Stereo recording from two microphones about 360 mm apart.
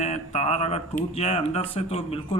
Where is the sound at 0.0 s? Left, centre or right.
Centre.